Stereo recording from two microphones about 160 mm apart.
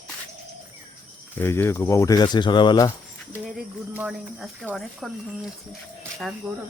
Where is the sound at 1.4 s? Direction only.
15° left (ahead or behind).